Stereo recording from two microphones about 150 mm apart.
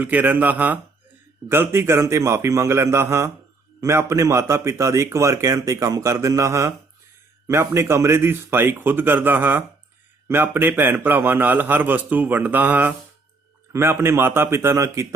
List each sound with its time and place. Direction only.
0.0 s a man's voice: 10° right (ahead or behind)